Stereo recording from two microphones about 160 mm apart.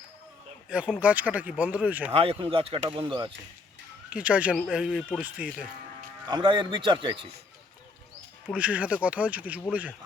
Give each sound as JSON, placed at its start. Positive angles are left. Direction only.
{"t": 0.7, "sound": "speech", "side_deg": -10}
{"t": 2.1, "sound": "speech", "side_deg": -35}
{"t": 4.1, "sound": "speech", "side_deg": -10}
{"t": 6.2, "sound": "a man's voice", "side_deg": -30}
{"t": 8.5, "sound": "speech", "side_deg": -10}